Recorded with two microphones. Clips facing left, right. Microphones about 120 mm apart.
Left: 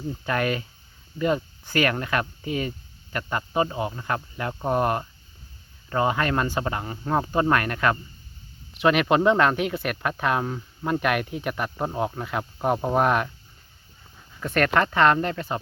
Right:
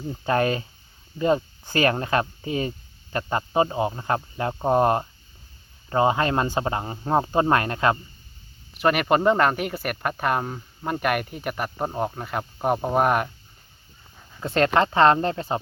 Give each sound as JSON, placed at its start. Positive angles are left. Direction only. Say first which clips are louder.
{"t": 0.3, "sound": "speech", "louder": "right 4 dB", "side_deg": -30}
{"t": 1.7, "sound": "speech", "louder": "right 2 dB", "side_deg": -30}
{"t": 8.7, "sound": "speech", "louder": "even", "side_deg": -5}
{"t": 14.4, "sound": "speech", "louder": "right 2 dB", "side_deg": -25}